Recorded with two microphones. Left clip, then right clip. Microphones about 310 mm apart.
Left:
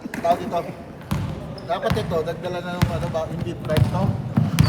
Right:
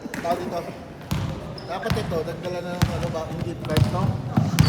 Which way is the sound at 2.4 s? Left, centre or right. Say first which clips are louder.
Left 2 dB; centre.